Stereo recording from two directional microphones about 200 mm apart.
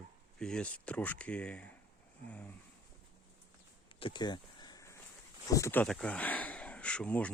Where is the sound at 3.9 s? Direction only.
25° left (ahead or behind).